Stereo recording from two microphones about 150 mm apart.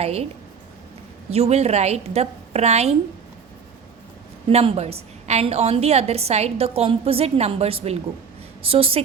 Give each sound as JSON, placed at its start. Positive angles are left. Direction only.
{"t": 0.0, "sound": "a woman's voice", "side_deg": -45}
{"t": 1.3, "sound": "a woman's voice", "side_deg": -45}
{"t": 4.4, "sound": "a woman's voice", "side_deg": -40}